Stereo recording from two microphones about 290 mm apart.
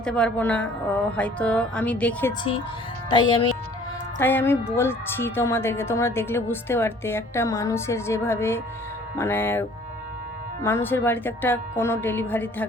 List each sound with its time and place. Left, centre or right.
0.0 s a woman's voice: centre
3.1 s a woman's voice: centre